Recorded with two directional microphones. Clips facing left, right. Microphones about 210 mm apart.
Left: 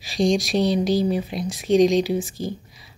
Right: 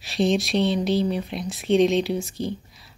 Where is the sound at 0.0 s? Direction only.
Centre (ahead or behind).